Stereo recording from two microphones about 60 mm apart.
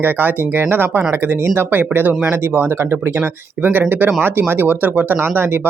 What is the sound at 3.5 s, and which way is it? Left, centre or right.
Speech, right.